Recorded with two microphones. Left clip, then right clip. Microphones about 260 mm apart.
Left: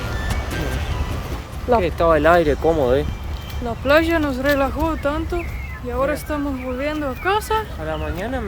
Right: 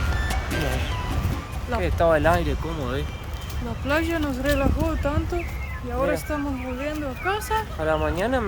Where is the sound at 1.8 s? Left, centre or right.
Centre.